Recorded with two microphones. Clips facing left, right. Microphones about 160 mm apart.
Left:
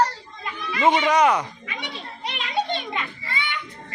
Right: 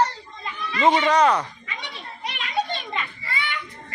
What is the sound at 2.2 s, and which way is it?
Children playing, 25° left (ahead or behind).